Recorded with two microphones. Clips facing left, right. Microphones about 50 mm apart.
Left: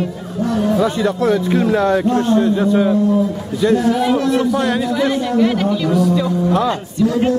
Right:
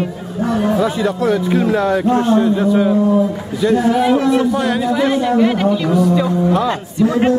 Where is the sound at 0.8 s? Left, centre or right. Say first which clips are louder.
Even; centre.